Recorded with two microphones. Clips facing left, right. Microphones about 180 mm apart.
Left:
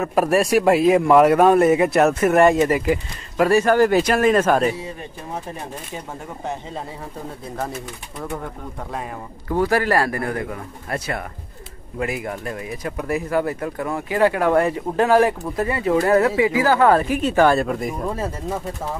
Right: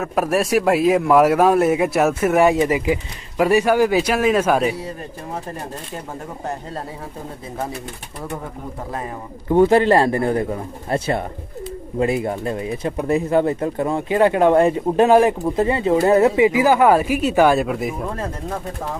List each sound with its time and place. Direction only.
0.0 s a man's voice: centre (ahead or behind)
9.5 s speech: 25° right (ahead or behind); by 18.6 s 5° left (ahead or behind)